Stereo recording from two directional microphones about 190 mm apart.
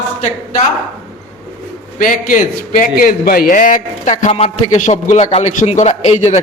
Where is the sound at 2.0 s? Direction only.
45° left (ahead or behind).